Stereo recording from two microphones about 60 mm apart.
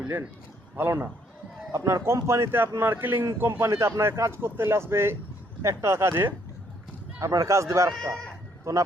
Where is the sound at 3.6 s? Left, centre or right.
Right.